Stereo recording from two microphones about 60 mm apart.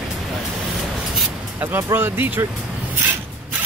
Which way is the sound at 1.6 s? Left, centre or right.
Right.